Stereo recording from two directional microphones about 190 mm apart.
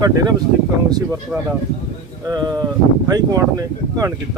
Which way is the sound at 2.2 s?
20° right (ahead or behind).